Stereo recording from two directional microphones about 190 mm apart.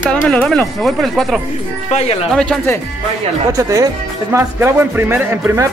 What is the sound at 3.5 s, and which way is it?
Speech, 15° right (ahead or behind).